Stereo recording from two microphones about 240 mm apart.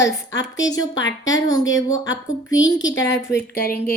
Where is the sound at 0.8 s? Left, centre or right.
Left.